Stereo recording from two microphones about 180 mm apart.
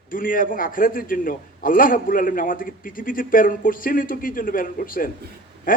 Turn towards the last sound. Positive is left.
turn(degrees=50)  # may be behind; listen again after turning